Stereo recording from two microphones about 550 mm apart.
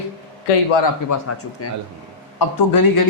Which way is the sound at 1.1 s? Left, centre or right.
Left.